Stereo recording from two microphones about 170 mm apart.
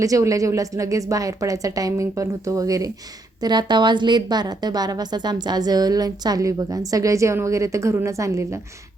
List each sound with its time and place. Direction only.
0.0 s a woman's voice: 20° right (ahead or behind)